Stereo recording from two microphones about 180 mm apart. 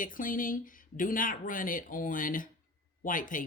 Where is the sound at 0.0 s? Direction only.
50° left (ahead or behind).